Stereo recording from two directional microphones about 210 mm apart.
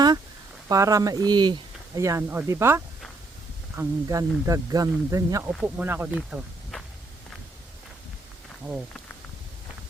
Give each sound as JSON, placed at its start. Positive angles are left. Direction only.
{"t": 0.7, "sound": "speech", "side_deg": -15}
{"t": 6.1, "sound": "snake", "side_deg": 0}